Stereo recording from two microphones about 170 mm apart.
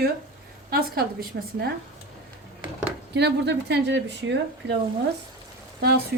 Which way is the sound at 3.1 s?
80° right.